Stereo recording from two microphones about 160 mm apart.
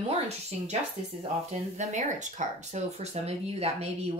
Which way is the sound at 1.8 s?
50° right (ahead or behind).